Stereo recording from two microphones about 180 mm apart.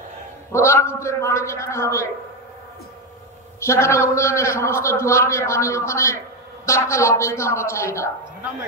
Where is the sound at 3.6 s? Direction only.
15° left (ahead or behind).